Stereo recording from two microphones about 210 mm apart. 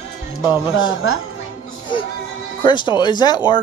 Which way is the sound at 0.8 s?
70° left (ahead or behind).